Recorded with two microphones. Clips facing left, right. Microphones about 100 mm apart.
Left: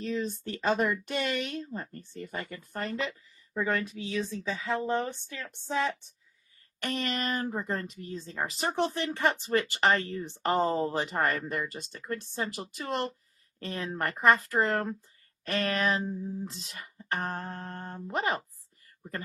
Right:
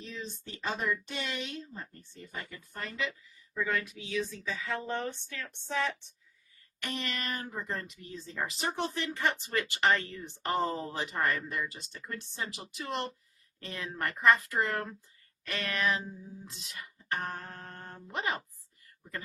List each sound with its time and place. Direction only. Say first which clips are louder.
0.0 s speech: left 10 dB; 55° left (ahead or behind); by 5.9 s 20° left (ahead or behind)
6.8 s speech: left 5 dB; 40° left (ahead or behind)
11.1 s speech: left 3 dB; 50° left (ahead or behind); by 18.2 s 30° left (ahead or behind)